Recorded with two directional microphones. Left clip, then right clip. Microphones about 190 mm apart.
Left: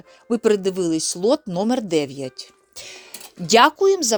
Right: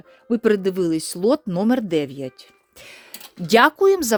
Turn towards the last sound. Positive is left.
turn(degrees=-35)  # may be behind; listen again after turning